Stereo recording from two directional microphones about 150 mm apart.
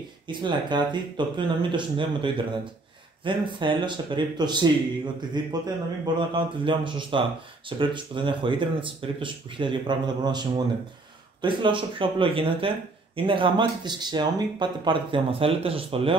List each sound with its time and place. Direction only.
0.3 s speech: 30° right (ahead or behind)